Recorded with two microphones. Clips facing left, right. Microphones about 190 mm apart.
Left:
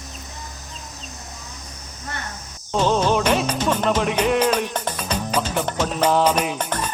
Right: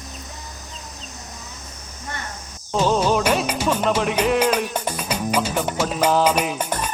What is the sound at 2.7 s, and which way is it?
Music, 5° right (ahead or behind).